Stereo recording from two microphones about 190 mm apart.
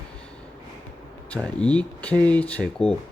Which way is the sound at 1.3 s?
5° left (ahead or behind).